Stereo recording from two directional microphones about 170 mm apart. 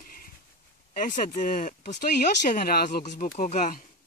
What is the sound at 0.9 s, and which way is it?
Speech, 50° left (ahead or behind).